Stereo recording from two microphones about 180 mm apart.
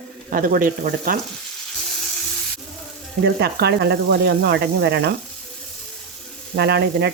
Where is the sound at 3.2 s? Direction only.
65° right (ahead or behind).